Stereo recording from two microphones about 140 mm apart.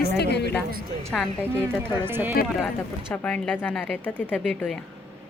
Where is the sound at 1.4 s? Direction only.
15° right (ahead or behind).